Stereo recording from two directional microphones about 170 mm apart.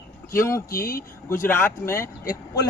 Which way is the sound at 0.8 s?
60° left (ahead or behind).